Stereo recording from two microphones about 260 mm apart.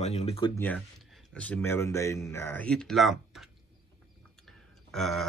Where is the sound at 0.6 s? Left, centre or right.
Centre.